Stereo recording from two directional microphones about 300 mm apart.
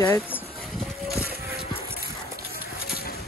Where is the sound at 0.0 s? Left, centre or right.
Centre.